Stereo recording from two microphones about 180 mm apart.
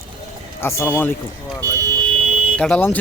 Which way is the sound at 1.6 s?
20° right (ahead or behind).